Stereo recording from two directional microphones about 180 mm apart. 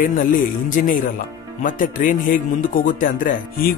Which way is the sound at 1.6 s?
50° left (ahead or behind).